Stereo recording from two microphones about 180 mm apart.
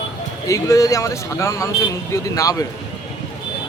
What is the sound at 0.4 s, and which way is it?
Speech, 20° left (ahead or behind).